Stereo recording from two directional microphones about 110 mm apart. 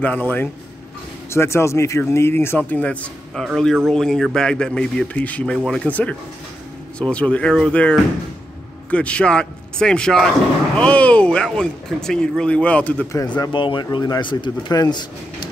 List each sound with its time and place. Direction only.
0.0 s speech: 15° left (ahead or behind)
1.3 s speech: 25° left (ahead or behind)
3.4 s speech: centre (ahead or behind)
13.5 s speech: 50° left (ahead or behind)